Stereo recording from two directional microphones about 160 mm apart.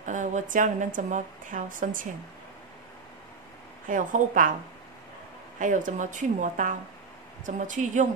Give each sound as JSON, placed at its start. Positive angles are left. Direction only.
{"t": 0.0, "sound": "a woman's voice", "side_deg": -50}
{"t": 3.8, "sound": "a woman's voice", "side_deg": -55}
{"t": 5.6, "sound": "a woman's voice", "side_deg": -55}